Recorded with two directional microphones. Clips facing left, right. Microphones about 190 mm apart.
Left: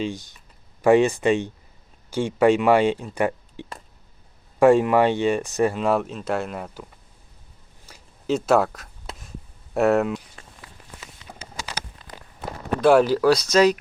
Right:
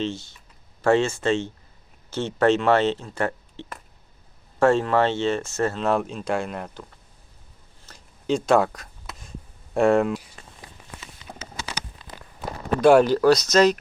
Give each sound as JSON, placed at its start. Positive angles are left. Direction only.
{"t": 0.0, "sound": "speech", "side_deg": 15}
{"t": 7.9, "sound": "a sound", "side_deg": 5}
{"t": 9.7, "sound": "speech", "side_deg": 5}
{"t": 11.3, "sound": "clip-clop", "side_deg": -5}
{"t": 12.8, "sound": "speech", "side_deg": 0}